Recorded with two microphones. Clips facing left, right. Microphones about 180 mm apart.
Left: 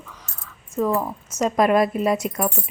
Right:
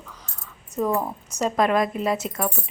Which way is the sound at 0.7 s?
20° right (ahead or behind).